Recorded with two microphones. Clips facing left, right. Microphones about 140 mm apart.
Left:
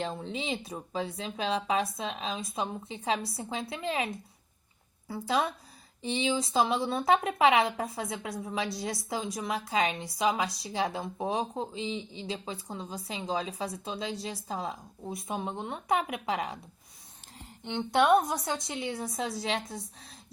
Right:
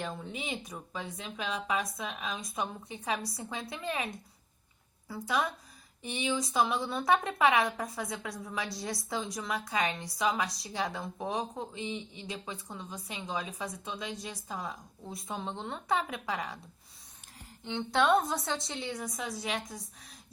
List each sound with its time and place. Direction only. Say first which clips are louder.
0.0 s a woman's voice: left 4 dB; 30° left (ahead or behind)
17.6 s a woman's voice: left 3 dB; 20° left (ahead or behind)